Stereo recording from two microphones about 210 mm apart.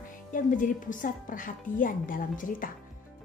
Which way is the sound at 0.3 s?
40° left (ahead or behind).